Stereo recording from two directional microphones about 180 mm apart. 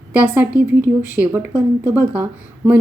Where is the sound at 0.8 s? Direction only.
10° right (ahead or behind).